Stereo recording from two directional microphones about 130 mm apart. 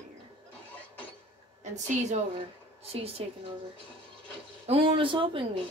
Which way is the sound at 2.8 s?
50° right (ahead or behind).